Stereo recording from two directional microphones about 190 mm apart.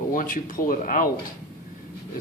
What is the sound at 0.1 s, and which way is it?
A man's voice, 45° left (ahead or behind).